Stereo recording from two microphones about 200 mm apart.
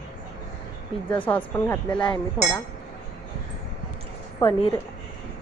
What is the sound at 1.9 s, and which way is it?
Speech, 25° left (ahead or behind).